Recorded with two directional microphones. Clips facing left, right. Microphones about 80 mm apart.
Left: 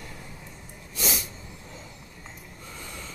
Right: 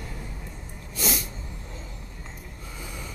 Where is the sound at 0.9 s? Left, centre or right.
Centre.